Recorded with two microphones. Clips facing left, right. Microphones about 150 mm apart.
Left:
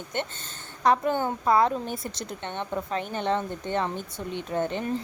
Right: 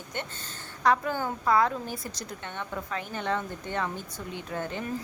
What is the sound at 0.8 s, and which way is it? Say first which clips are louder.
A woman's voice: left 3 dB; 25° left (ahead or behind).